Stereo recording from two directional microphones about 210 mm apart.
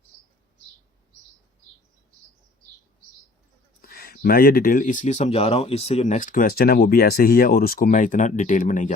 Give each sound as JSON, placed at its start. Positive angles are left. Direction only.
{"t": 3.8, "sound": "speech", "side_deg": 45}